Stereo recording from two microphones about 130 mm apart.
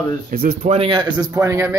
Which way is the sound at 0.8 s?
40° right (ahead or behind).